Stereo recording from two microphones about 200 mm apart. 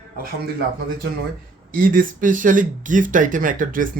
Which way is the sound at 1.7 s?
45° right (ahead or behind).